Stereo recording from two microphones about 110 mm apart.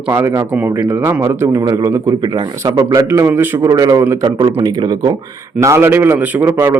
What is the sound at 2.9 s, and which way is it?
Speech, 25° right (ahead or behind).